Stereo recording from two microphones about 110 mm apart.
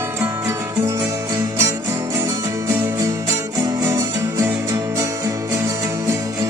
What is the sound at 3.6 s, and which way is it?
Music, 35° right (ahead or behind).